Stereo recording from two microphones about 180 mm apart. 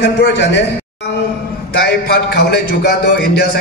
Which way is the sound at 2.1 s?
65° left (ahead or behind).